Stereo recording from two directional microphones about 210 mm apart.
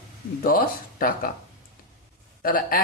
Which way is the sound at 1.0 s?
40° left (ahead or behind).